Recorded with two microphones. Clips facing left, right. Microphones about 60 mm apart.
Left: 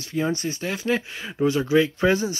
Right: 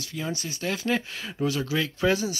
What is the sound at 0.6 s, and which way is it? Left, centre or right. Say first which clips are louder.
Speech: right 2 dB; centre.